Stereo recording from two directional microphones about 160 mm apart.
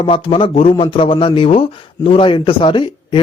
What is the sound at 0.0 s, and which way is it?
Speech, 35° left (ahead or behind).